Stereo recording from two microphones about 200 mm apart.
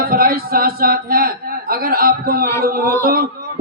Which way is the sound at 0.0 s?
45° right (ahead or behind).